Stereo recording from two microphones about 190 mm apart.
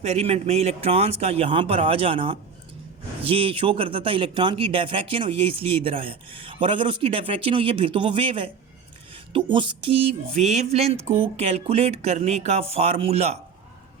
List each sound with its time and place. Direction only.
0.0 s speech: 35° right (ahead or behind)
9.1 s music: 25° right (ahead or behind)
10.3 s speech: 35° right (ahead or behind)